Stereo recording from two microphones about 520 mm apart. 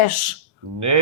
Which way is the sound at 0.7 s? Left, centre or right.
Right.